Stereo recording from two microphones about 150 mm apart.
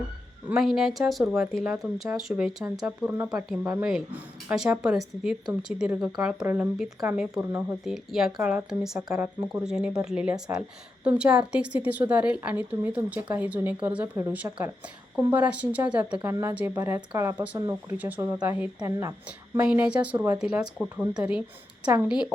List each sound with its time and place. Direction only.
0.6 s a woman's voice: centre (ahead or behind)
18.8 s a woman's voice: 20° right (ahead or behind)
19.6 s a woman's voice: 5° right (ahead or behind)